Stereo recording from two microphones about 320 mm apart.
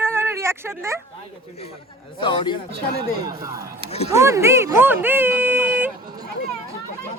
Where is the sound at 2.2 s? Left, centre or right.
Centre.